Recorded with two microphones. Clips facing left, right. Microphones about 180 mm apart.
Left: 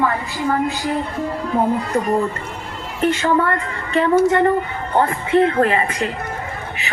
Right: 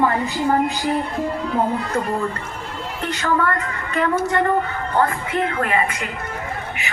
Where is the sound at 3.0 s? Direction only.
25° left (ahead or behind).